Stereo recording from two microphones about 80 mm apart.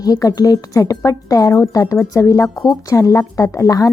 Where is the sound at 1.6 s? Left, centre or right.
Left.